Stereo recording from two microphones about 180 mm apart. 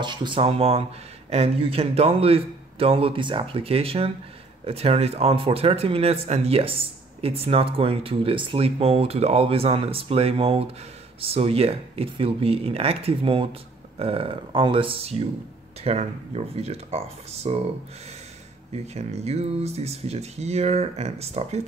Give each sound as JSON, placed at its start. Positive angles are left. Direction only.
{"t": 0.0, "sound": "speech", "side_deg": -25}
{"t": 18.9, "sound": "speech", "side_deg": -35}